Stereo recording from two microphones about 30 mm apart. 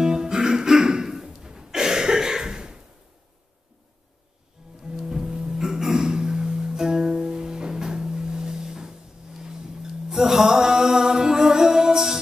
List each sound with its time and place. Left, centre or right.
0.0 s music: right
1.0 s a sound: centre
4.6 s music: right
6.1 s music: right